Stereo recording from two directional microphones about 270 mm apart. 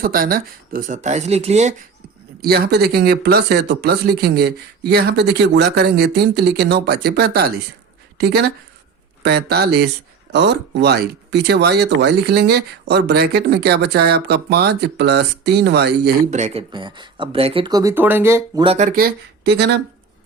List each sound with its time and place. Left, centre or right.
0.0 s speech: right
2.4 s speech: right